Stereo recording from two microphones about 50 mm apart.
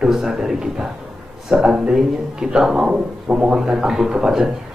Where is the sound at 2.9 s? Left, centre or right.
Right.